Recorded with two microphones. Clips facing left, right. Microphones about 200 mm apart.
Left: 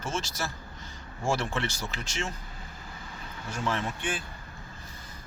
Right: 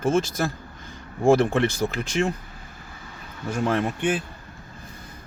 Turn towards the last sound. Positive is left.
turn(degrees=-60)  # may be behind; listen again after turning